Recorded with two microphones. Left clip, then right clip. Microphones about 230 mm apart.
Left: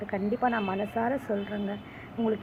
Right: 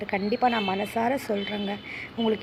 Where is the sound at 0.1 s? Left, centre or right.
Right.